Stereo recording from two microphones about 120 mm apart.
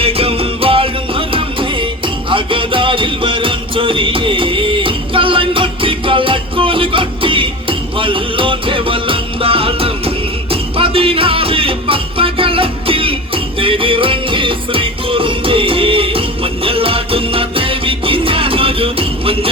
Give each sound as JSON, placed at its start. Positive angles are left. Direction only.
{"t": 0.0, "sound": "music", "side_deg": -50}